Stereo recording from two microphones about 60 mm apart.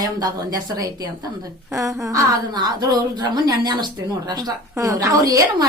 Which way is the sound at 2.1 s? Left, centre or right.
Right.